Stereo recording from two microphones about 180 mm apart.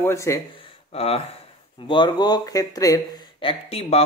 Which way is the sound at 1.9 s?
25° left (ahead or behind).